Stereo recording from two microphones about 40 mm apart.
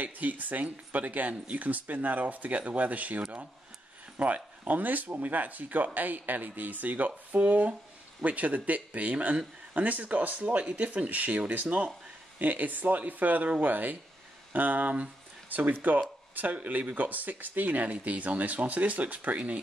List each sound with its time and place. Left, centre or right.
0.0 s speech: right
4.2 s speech: right
16.5 s speech: right